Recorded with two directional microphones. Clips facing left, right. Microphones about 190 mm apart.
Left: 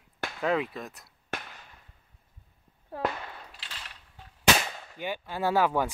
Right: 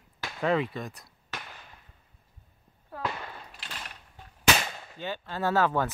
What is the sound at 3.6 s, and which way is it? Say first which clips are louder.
Mechanisms: right 4 dB; 50° right (ahead or behind).